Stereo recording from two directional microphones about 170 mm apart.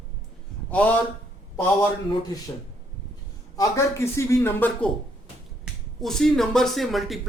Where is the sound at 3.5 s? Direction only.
15° left (ahead or behind).